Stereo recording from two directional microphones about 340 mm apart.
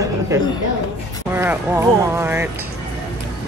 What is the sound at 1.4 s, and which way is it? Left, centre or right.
Speech, centre.